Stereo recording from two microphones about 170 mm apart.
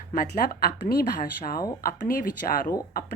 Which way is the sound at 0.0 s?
60° left (ahead or behind).